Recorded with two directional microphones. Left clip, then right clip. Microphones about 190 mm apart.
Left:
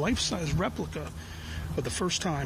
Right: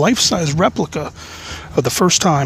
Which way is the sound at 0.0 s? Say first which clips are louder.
Right 15 dB; 45° right (ahead or behind).